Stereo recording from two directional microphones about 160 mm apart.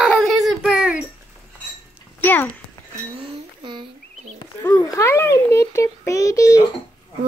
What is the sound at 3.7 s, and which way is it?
Bird, 30° right (ahead or behind).